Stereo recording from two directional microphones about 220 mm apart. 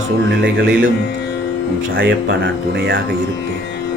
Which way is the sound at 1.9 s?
60° right (ahead or behind).